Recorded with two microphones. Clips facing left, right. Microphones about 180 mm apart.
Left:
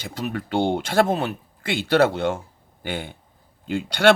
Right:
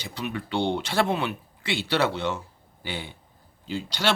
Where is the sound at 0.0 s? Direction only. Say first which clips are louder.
Left 3 dB; 45° left (ahead or behind).